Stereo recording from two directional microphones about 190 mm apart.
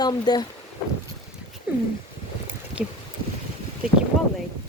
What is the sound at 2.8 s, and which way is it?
Speech, 5° right (ahead or behind).